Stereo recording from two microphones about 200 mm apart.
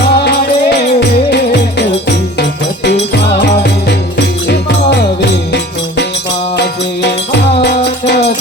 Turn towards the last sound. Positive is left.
turn(degrees=60)  # may be behind; listen again after turning